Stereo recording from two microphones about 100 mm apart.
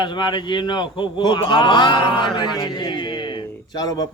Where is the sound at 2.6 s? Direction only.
50° left (ahead or behind).